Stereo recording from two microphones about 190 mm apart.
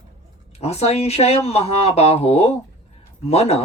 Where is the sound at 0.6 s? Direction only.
35° left (ahead or behind).